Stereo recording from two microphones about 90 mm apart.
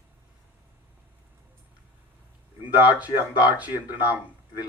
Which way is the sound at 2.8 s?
15° right (ahead or behind).